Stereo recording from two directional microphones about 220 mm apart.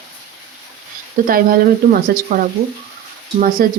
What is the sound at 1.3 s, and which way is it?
Speech, 40° right (ahead or behind).